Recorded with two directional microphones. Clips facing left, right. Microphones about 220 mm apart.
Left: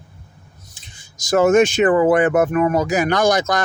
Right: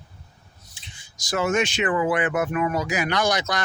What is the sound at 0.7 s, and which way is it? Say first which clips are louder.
Speech: left 2 dB; 45° left (ahead or behind).